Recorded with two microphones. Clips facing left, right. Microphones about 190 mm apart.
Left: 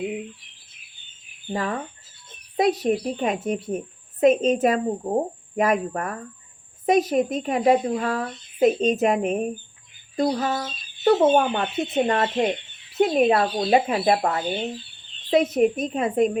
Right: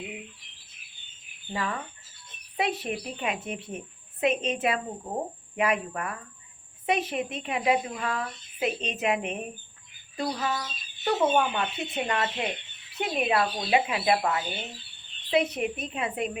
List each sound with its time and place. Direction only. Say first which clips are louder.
1.5 s speech: left 5 dB; 40° left (ahead or behind)